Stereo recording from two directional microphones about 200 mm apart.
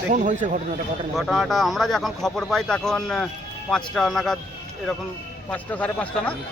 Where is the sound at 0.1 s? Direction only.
40° right (ahead or behind).